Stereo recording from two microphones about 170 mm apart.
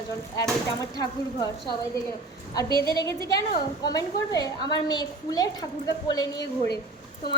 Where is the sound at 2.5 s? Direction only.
20° left (ahead or behind).